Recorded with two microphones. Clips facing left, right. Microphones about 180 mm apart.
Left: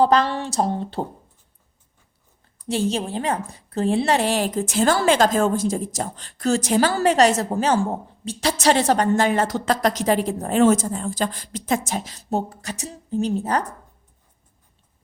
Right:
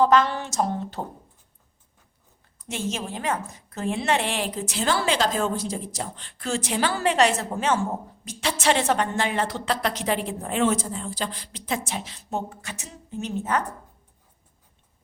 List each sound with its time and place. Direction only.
0.0 s a woman's voice: 35° left (ahead or behind)
2.6 s a woman's voice: 35° left (ahead or behind)